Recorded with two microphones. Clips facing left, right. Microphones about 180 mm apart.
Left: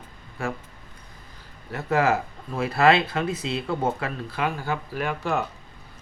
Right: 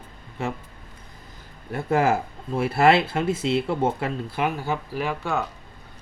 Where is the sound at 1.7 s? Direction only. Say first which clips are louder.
Right 1 dB; 30° right (ahead or behind); by 5.1 s 10° right (ahead or behind).